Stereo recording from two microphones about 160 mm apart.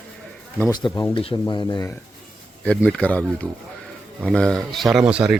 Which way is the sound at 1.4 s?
25° left (ahead or behind).